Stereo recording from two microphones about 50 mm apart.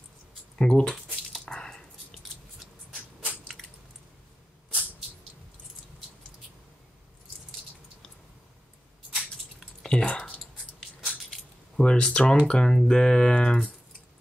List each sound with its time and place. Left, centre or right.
0.6 s speech: centre
1.4 s squish: centre
9.8 s a sound: centre
10.4 s dog: centre
11.7 s speech: centre